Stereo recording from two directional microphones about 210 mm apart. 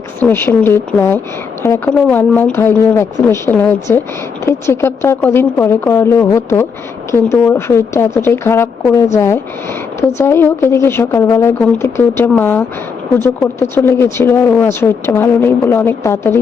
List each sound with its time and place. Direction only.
0.2 s speech: 10° left (ahead or behind)